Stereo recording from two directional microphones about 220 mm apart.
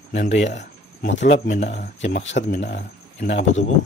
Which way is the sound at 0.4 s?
30° left (ahead or behind).